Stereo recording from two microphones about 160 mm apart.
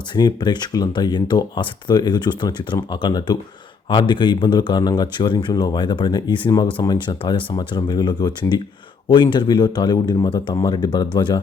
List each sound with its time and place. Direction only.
0.1 s speech: 25° left (ahead or behind)